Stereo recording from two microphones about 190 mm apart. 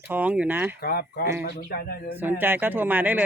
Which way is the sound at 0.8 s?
55° left (ahead or behind).